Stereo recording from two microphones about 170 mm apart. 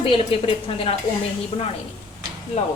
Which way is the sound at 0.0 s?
30° left (ahead or behind).